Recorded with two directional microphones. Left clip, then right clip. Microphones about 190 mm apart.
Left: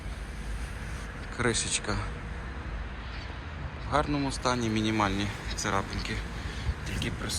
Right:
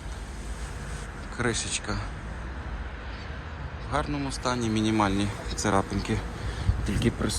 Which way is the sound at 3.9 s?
10° right (ahead or behind).